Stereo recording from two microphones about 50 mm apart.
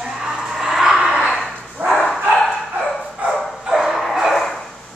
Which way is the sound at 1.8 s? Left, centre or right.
Right.